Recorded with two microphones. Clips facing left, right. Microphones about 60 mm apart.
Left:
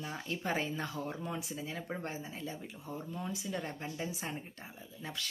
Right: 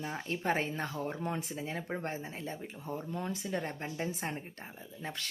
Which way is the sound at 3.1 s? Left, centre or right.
Right.